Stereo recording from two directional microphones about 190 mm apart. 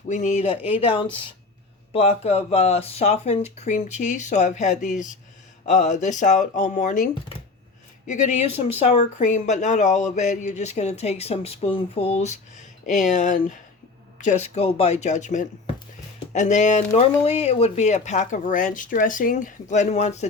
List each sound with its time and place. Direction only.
0.1 s speech: 40° left (ahead or behind)